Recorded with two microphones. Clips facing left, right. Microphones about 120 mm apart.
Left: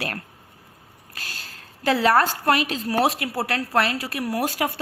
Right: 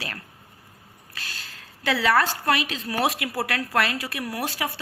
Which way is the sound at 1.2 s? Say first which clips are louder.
Left 1 dB; 45° left (ahead or behind).